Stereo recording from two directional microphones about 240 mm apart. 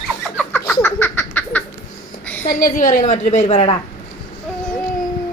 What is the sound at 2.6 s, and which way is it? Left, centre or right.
A woman's voice, left.